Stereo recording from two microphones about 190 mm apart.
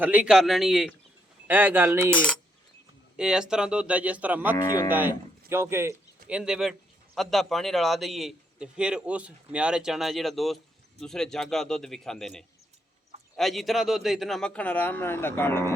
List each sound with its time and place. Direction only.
0.0 s a man's voice: 10° right (ahead or behind)
2.1 s a man's voice: 5° left (ahead or behind)
4.5 s speech: 20° left (ahead or behind)
4.9 s a man's voice: 10° right (ahead or behind); by 15.7 s 10° left (ahead or behind)